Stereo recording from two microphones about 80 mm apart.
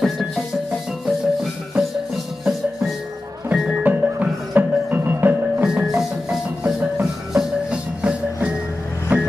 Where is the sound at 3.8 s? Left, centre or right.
Right.